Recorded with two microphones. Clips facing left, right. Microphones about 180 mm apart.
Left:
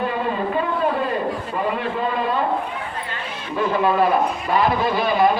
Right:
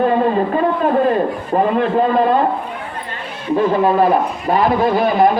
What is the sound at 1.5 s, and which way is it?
Speech, 45° right (ahead or behind).